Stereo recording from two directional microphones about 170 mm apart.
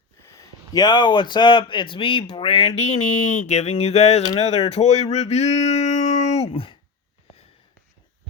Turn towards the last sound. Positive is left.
turn(degrees=30)  # may be behind; listen again after turning